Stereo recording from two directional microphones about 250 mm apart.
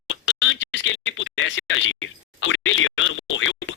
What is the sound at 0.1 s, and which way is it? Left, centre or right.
Speech, left.